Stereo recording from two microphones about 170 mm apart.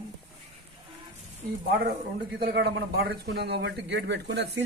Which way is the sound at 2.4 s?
70° right (ahead or behind).